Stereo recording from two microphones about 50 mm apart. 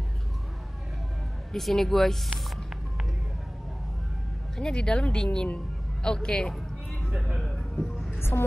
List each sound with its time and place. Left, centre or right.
1.5 s speech: centre
4.6 s speech: centre
7.1 s speech: centre
7.3 s music: centre
8.2 s music: left